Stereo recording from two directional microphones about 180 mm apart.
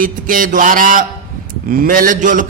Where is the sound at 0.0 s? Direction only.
50° right (ahead or behind).